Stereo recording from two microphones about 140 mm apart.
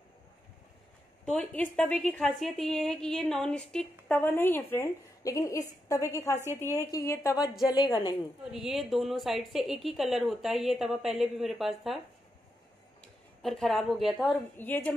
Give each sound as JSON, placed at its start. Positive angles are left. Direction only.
{"t": 1.2, "sound": "a woman's voice", "side_deg": 5}
{"t": 8.5, "sound": "a woman's voice", "side_deg": 0}
{"t": 13.0, "sound": "speech", "side_deg": 0}
{"t": 14.6, "sound": "a woman's voice", "side_deg": 15}